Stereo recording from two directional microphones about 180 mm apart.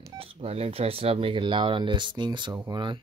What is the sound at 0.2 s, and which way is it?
Speech, 30° right (ahead or behind).